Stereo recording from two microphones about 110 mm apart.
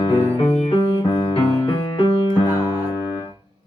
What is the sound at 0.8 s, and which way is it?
Piano, 45° left (ahead or behind).